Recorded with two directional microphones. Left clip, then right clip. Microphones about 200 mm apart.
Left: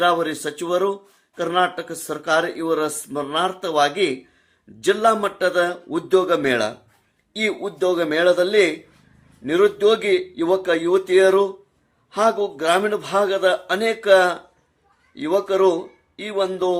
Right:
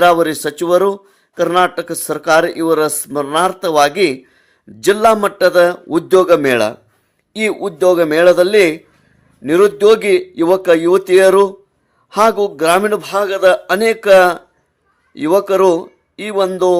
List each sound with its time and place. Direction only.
0.0 s a man's voice: 45° right (ahead or behind)